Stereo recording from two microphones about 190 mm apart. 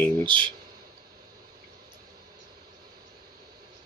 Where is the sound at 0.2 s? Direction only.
25° right (ahead or behind).